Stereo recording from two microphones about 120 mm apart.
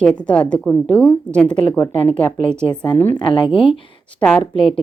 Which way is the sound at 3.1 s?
45° left (ahead or behind).